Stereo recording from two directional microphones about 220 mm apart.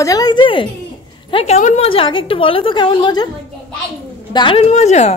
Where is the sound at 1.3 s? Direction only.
30° left (ahead or behind).